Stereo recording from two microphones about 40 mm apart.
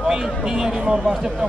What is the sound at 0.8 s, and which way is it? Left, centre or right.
Speech, right.